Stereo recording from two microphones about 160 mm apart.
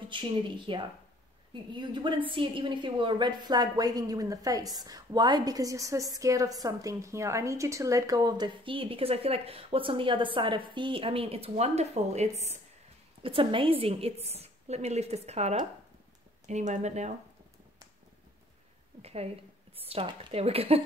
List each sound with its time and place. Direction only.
0.1 s a woman's voice: 30° right (ahead or behind); by 17.1 s 45° right (ahead or behind)
19.0 s a woman's voice: 40° right (ahead or behind)